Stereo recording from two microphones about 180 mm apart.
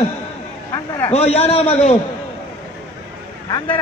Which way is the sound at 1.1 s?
35° left (ahead or behind).